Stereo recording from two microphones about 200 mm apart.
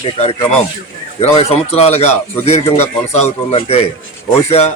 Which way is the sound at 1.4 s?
30° left (ahead or behind).